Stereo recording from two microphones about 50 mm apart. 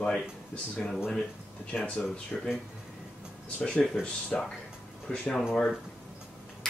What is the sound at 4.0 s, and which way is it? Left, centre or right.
Speech, centre.